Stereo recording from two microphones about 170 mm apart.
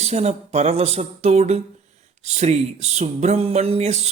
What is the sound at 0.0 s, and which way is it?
Speech, 40° right (ahead or behind).